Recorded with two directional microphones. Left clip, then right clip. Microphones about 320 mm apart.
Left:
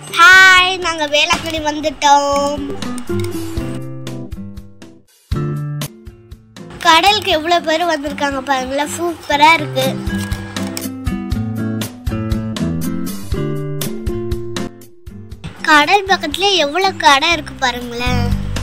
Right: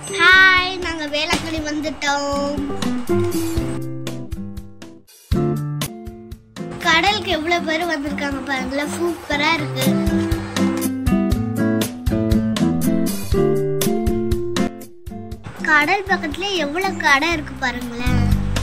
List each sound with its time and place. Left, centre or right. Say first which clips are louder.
0.1 s a child's voice: left 6 dB; centre
2.8 s music: right 2 dB; centre
5.3 s music: right 3 dB; centre
6.8 s a woman's voice: left 6 dB; centre
10.6 s music: right 3 dB; centre
15.6 s speech: left 5 dB; centre